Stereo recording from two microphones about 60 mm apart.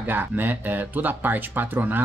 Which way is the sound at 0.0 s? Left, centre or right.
Right.